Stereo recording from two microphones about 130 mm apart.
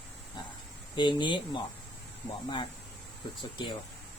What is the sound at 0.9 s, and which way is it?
Speech, 35° left (ahead or behind).